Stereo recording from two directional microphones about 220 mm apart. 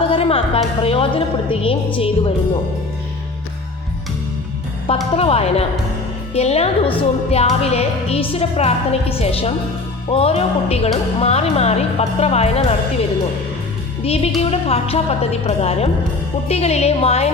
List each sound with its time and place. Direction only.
0.1 s a woman's voice: 25° left (ahead or behind)
5.1 s a woman's voice: 25° left (ahead or behind)
14.0 s a woman's voice: 25° left (ahead or behind)